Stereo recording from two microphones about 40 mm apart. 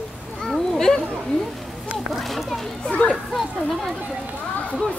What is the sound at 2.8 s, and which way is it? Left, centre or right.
Speech, left.